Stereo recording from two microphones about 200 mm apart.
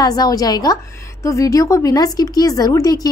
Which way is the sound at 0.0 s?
20° left (ahead or behind).